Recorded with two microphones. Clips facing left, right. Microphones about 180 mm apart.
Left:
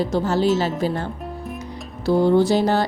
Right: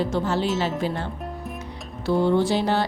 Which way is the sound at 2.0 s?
40° left (ahead or behind).